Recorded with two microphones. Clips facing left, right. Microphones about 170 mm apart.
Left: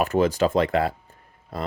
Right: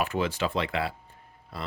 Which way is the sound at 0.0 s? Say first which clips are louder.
Left 7 dB; 40° left (ahead or behind).